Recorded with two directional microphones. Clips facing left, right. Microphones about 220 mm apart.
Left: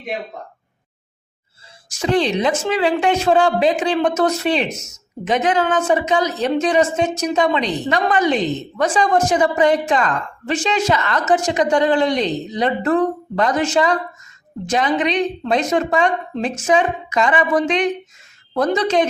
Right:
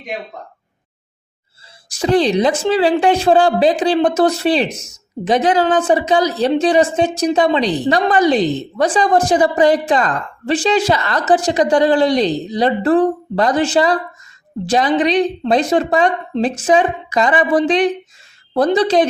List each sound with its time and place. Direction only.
1.9 s a woman's voice: 35° right (ahead or behind)